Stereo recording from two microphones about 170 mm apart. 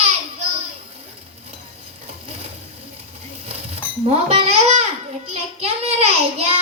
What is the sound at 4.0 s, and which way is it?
Babbling, 35° right (ahead or behind).